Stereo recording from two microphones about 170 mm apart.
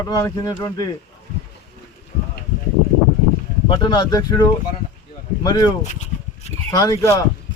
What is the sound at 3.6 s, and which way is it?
Speech, 25° left (ahead or behind).